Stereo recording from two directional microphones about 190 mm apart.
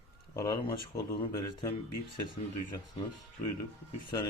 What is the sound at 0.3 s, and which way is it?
Speech, 20° left (ahead or behind).